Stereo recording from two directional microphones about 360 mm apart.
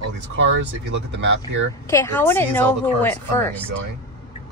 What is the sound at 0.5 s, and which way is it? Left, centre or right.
Speech, right.